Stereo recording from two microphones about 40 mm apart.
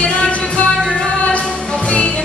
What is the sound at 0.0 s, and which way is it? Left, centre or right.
Music, left.